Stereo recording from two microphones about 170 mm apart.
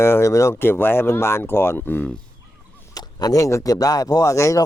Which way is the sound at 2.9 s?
20° left (ahead or behind).